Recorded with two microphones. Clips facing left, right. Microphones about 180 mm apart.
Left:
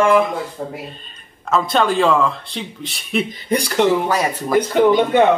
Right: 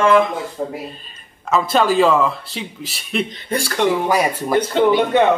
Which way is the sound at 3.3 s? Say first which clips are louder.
Left 3 dB; 15° left (ahead or behind).